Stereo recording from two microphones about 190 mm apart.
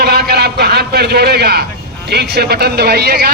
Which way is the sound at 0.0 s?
55° right (ahead or behind).